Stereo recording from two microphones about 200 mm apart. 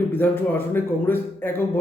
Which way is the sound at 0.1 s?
10° left (ahead or behind).